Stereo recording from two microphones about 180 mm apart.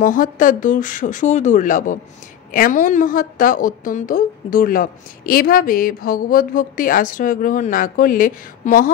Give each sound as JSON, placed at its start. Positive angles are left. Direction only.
{"t": 0.0, "sound": "a woman's voice", "side_deg": 50}